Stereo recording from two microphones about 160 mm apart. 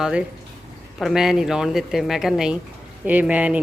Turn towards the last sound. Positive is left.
turn(degrees=-10)  # may be behind; listen again after turning